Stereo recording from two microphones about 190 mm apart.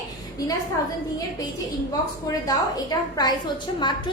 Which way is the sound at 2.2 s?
20° left (ahead or behind).